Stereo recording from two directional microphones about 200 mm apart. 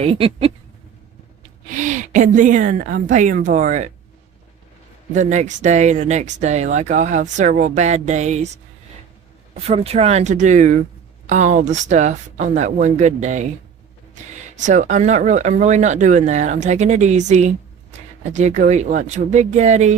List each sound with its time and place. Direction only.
0.0 s speech: 30° right (ahead or behind)
1.8 s speech: 40° right (ahead or behind)
5.1 s speech: 35° right (ahead or behind)
9.6 s speech: 30° right (ahead or behind)
14.6 s speech: 35° right (ahead or behind)